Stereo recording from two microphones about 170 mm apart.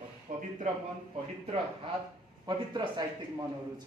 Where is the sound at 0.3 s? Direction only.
50° right (ahead or behind).